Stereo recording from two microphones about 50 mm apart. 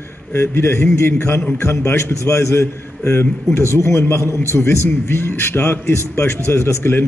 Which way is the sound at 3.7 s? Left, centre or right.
Left.